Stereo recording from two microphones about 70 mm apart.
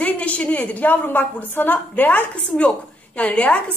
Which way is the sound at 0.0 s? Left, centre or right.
Centre.